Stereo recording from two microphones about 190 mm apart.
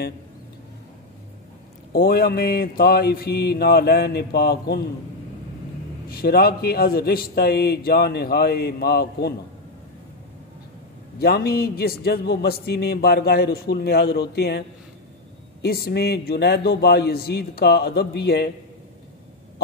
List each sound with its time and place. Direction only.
1.9 s a man's voice: 55° left (ahead or behind)
6.0 s a man's voice: 55° left (ahead or behind)
11.1 s a man's voice: 55° left (ahead or behind)
15.6 s a man's voice: 55° left (ahead or behind)